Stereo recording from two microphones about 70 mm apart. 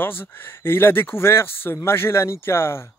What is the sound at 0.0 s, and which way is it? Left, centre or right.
Speech, left.